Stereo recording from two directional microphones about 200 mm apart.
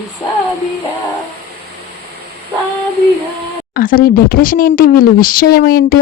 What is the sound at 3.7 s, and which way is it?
Speech, 45° left (ahead or behind).